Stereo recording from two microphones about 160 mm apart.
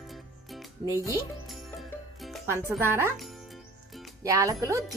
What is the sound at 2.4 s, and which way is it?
Speech, 15° right (ahead or behind).